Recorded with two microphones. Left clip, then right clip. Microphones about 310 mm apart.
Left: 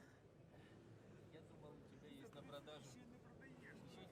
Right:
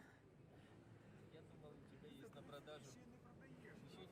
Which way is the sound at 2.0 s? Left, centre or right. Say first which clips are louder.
Left 1 dB; centre.